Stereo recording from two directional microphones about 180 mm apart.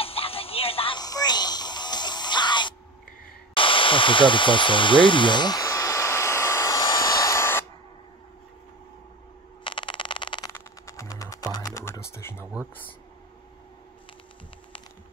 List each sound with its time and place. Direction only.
0.0 s music: 30° left (ahead or behind)
3.5 s dental drill: 30° left (ahead or behind)
9.7 s a sound: 25° left (ahead or behind)
10.9 s music: 15° left (ahead or behind)